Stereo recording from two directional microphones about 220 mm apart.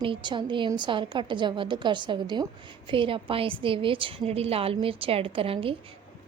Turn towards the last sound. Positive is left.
turn(degrees=-25)  # may be behind; listen again after turning